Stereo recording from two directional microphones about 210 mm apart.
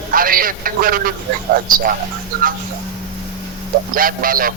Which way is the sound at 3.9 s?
40° right (ahead or behind).